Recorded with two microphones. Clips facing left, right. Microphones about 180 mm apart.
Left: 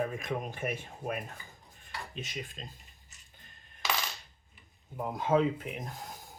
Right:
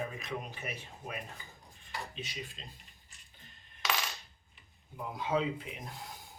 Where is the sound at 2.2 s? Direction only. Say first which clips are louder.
Left 3 dB; 50° left (ahead or behind).